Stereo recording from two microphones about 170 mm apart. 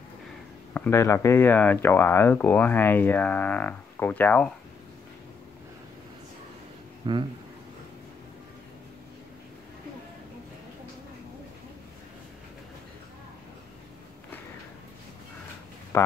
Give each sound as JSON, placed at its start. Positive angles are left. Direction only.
{"t": 0.7, "sound": "speech", "side_deg": 15}
{"t": 7.0, "sound": "speech", "side_deg": -25}